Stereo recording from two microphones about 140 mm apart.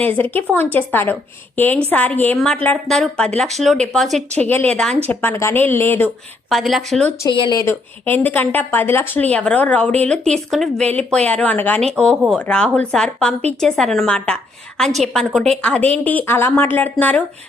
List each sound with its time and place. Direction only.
0.0 s speech: 15° left (ahead or behind)
4.4 s speech: 15° left (ahead or behind)
6.5 s speech: centre (ahead or behind)
7.3 s speech: 35° left (ahead or behind)
7.6 s speech: 15° left (ahead or behind)